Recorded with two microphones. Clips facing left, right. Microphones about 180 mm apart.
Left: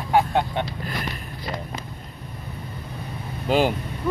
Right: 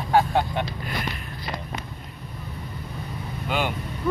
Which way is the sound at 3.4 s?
40° left (ahead or behind).